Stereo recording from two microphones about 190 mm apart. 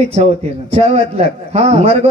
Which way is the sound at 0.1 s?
35° right (ahead or behind).